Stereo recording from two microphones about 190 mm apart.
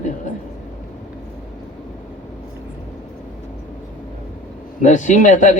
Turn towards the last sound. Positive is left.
turn(degrees=40)  # may be behind; listen again after turning